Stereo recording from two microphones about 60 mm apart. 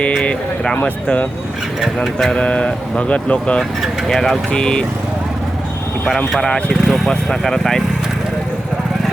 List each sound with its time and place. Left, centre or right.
0.1 s speech: centre
2.3 s speech: centre
4.1 s speech: centre
4.5 s speech: centre
6.4 s speech: centre
6.8 s speech: centre